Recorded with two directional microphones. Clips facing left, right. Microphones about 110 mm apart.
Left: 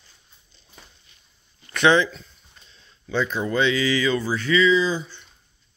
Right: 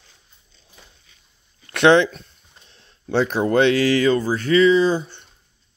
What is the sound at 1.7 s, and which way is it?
Speech, 65° right (ahead or behind).